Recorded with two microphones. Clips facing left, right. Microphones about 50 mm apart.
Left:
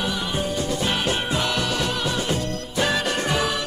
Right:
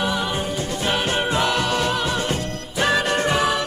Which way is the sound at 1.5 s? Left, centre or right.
Right.